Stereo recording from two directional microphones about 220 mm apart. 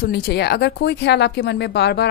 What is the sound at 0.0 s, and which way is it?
Speech, 50° left (ahead or behind).